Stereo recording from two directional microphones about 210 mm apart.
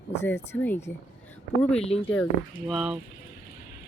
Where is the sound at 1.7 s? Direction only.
30° left (ahead or behind).